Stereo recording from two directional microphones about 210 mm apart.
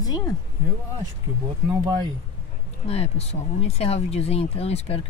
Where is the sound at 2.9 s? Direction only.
30° left (ahead or behind).